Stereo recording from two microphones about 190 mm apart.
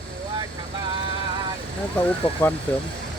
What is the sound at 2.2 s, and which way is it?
Speech, 25° left (ahead or behind).